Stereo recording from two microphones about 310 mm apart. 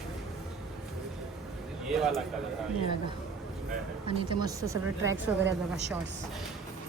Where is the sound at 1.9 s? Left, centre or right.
Centre.